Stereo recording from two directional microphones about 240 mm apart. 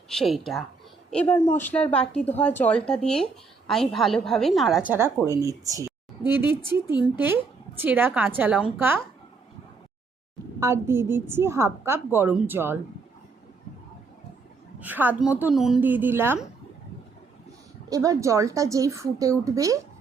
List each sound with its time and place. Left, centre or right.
0.1 s a woman's voice: centre
10.6 s a woman's voice: centre
14.8 s a woman's voice: centre
17.8 s a woman's voice: centre